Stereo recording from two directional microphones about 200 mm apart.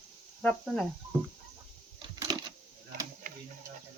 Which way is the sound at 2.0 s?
20° right (ahead or behind).